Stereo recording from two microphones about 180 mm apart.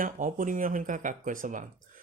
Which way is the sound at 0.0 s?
45° right (ahead or behind).